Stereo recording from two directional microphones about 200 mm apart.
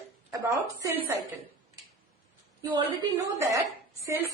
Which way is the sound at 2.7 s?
15° right (ahead or behind).